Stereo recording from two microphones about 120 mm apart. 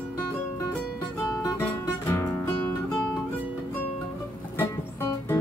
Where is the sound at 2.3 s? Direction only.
15° left (ahead or behind).